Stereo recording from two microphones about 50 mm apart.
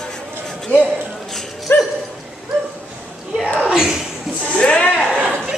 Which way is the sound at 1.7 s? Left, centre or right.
Left.